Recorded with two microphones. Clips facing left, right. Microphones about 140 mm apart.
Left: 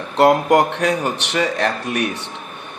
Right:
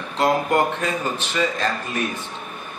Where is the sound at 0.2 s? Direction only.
75° left (ahead or behind).